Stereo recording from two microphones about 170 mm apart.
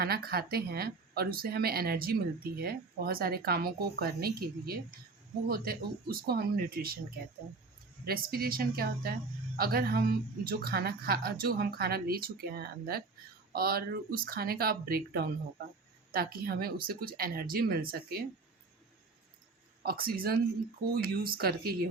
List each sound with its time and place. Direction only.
0.0 s a woman's voice: 65° right (ahead or behind)
8.0 s a woman's voice: 60° right (ahead or behind)
19.8 s a woman's voice: 60° right (ahead or behind)